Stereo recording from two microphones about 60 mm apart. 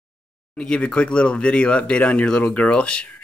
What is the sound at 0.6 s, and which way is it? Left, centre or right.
Speech, centre.